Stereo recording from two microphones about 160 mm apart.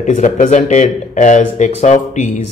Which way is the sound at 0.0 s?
50° left (ahead or behind).